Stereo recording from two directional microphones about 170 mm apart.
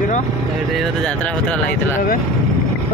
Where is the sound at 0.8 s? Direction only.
5° left (ahead or behind).